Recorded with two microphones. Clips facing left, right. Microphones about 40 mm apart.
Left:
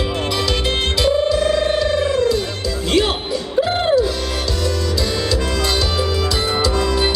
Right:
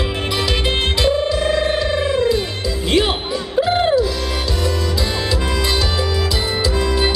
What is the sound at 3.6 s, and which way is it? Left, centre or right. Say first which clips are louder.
Music: right 2 dB; centre.